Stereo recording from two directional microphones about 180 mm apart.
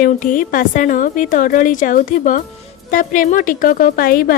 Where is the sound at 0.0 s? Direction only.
45° left (ahead or behind).